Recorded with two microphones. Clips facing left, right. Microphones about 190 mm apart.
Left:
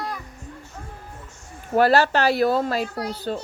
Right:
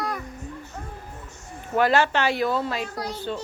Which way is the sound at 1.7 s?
35° left (ahead or behind).